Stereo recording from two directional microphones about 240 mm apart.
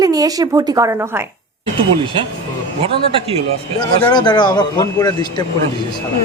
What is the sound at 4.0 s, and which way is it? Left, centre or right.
A man's voice, centre.